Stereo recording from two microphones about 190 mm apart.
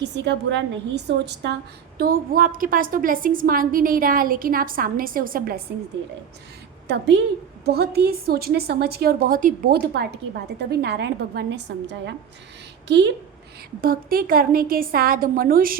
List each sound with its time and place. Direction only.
0.0 s a woman's voice: 65° right (ahead or behind)
2.0 s a woman's voice: 50° right (ahead or behind)
6.8 s a woman's voice: 65° right (ahead or behind)
13.8 s a woman's voice: 50° right (ahead or behind)